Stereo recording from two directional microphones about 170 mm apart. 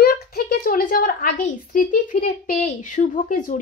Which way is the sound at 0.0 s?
60° left (ahead or behind).